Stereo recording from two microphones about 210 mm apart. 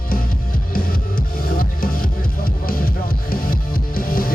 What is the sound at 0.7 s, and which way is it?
Music, 45° left (ahead or behind).